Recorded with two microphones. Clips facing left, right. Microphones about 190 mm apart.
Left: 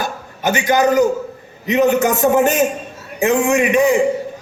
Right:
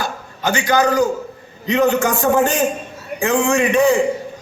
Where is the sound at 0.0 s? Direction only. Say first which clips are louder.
Left 2 dB; 20° left (ahead or behind).